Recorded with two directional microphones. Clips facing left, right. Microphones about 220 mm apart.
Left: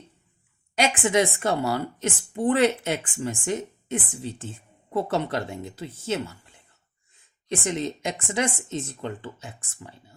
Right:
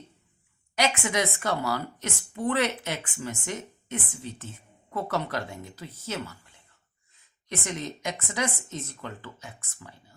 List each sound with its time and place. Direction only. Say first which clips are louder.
0.8 s a woman's voice: left 5 dB; 30° left (ahead or behind)